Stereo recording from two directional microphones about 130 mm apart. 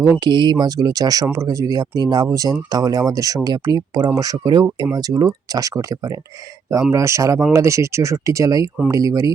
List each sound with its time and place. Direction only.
0.3 s speech: 35° right (ahead or behind)